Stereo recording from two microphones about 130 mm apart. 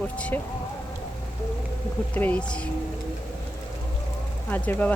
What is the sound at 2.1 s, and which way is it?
Speech, 10° left (ahead or behind).